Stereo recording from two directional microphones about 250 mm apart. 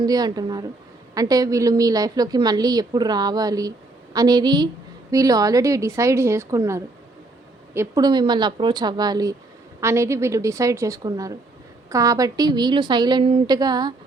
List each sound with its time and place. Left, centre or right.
0.0 s a woman's voice: centre